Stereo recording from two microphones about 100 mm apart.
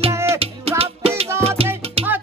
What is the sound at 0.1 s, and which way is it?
Music, 25° right (ahead or behind).